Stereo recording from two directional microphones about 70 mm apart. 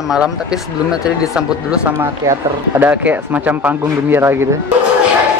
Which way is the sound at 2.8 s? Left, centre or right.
Right.